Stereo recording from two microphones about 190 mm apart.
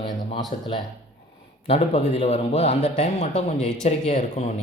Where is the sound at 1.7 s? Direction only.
30° left (ahead or behind).